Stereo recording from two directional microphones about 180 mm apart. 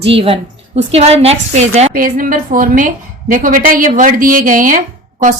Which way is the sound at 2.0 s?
50° right (ahead or behind).